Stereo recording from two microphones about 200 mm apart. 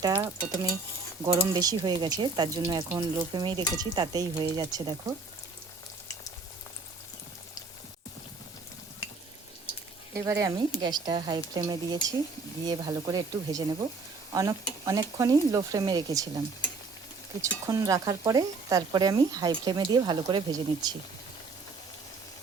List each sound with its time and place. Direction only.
0.0 s stir: 20° right (ahead or behind)
1.2 s speech: 20° right (ahead or behind)
10.2 s speech: 15° right (ahead or behind)
17.4 s speech: 15° right (ahead or behind)